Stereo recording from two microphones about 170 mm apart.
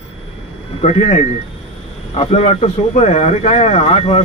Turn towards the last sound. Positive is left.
turn(degrees=35)  # may be behind; listen again after turning